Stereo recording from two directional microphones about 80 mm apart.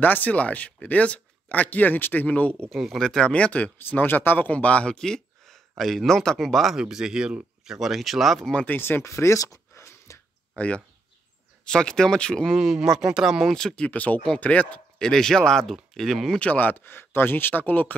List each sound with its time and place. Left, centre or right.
0.0 s speech: left
2.7 s speech: centre
8.5 s speech: left
10.5 s speech: centre
12.5 s speech: centre
13.8 s speech: centre
16.3 s speech: centre